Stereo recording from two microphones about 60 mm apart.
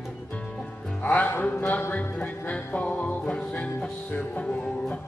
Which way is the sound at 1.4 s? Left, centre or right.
Left.